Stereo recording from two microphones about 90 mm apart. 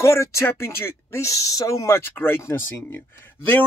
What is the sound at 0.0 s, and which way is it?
Speech, 35° left (ahead or behind).